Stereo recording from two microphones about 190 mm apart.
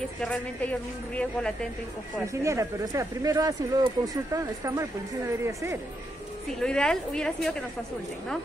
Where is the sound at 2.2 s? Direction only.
15° right (ahead or behind).